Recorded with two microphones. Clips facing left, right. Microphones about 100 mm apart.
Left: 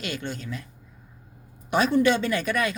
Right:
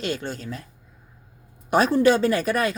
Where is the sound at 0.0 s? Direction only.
35° right (ahead or behind).